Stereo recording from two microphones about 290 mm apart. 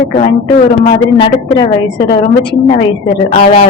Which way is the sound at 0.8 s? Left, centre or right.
Centre.